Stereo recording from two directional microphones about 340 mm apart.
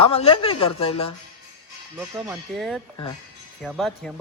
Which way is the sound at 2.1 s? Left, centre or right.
Centre.